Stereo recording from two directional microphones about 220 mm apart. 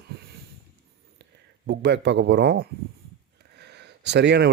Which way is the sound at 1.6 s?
50° right (ahead or behind).